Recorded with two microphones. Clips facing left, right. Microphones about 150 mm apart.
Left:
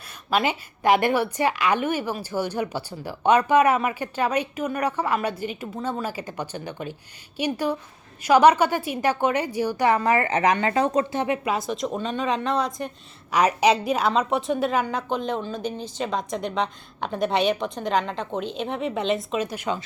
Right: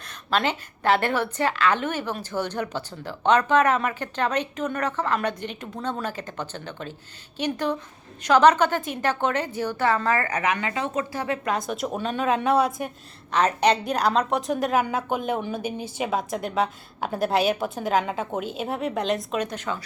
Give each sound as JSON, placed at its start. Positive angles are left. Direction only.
{"t": 0.3, "sound": "a woman's voice", "side_deg": 10}
{"t": 11.1, "sound": "speech", "side_deg": 20}
{"t": 11.4, "sound": "a woman's voice", "side_deg": 5}
{"t": 13.3, "sound": "a woman's voice", "side_deg": 10}